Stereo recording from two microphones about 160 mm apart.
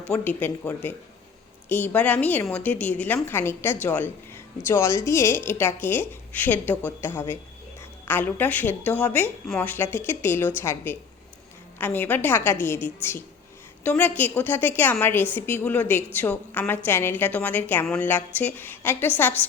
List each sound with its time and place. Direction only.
0.1 s speech: 10° left (ahead or behind)